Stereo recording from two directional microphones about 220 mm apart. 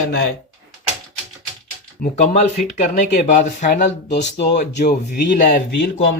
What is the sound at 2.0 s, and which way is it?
Speech, 35° left (ahead or behind).